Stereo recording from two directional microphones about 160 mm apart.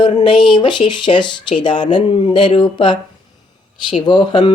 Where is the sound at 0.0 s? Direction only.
30° left (ahead or behind).